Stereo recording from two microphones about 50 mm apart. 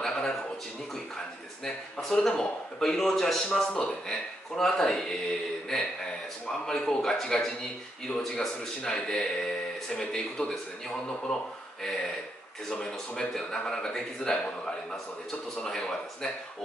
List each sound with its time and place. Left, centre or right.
0.0 s a sound: centre
1.6 s a man's voice: centre
8.8 s a man's voice: centre
11.8 s a man's voice: centre
15.6 s a man's voice: centre